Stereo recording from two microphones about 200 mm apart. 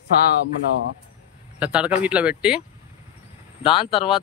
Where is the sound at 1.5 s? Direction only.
5° right (ahead or behind).